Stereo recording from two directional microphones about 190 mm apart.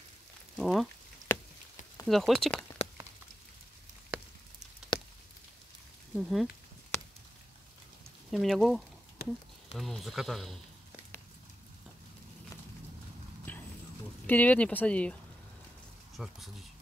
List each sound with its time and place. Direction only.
0.6 s speech: centre (ahead or behind)
1.3 s a sound: 15° left (ahead or behind)
2.0 s speech: centre (ahead or behind)
4.1 s a sound: 5° right (ahead or behind)
6.1 s speech: 5° right (ahead or behind)
8.3 s speech: centre (ahead or behind)
9.2 s speech: 55° left (ahead or behind)
9.8 s speech: centre (ahead or behind)
13.5 s clip-clop: 10° left (ahead or behind)
14.2 s speech: 10° left (ahead or behind)
16.2 s speech: centre (ahead or behind)